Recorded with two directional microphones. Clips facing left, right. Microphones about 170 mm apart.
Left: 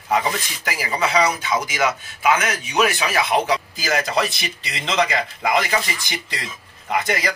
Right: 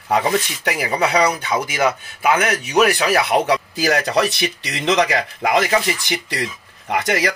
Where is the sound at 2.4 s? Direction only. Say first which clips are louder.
Right 4 dB; 65° right (ahead or behind).